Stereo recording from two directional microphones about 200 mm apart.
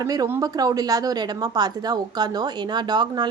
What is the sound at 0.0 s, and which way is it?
A woman's voice, 15° right (ahead or behind).